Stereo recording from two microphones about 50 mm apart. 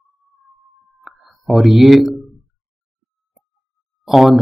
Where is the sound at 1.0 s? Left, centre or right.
Centre.